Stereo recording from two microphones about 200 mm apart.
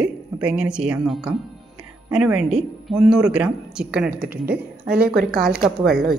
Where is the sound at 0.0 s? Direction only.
5° right (ahead or behind).